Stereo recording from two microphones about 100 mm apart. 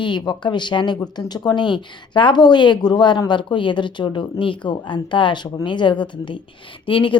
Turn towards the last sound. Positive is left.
turn(degrees=60)  # may be behind; listen again after turning